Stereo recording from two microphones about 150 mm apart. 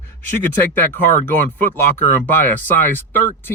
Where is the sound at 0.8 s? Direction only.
10° left (ahead or behind).